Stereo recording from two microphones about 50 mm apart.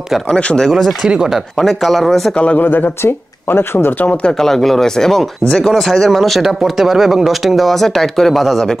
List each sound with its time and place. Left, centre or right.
0.3 s speech: centre
0.7 s speech: centre
1.0 s speech: centre
1.6 s speech: centre
2.3 s speech: left
2.6 s speech: left
4.4 s speech: centre